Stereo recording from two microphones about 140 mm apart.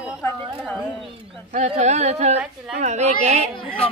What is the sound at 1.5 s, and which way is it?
Speech, 50° right (ahead or behind).